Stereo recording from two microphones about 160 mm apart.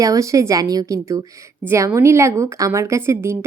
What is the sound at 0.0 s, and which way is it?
A woman's voice, 20° right (ahead or behind).